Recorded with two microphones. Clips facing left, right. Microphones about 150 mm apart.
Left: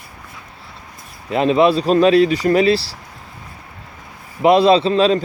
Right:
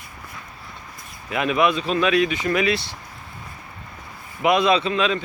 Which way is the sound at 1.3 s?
30° left (ahead or behind).